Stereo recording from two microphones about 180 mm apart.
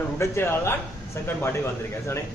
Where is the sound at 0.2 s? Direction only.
15° left (ahead or behind).